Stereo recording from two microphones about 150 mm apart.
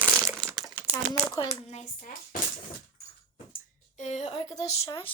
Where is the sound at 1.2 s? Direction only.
20° left (ahead or behind).